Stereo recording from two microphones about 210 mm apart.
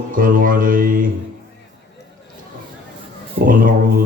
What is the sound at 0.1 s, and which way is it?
Speech, 40° right (ahead or behind).